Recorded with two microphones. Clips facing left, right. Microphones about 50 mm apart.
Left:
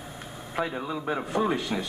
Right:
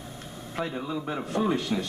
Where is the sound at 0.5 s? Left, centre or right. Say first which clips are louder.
Left 1 dB; centre.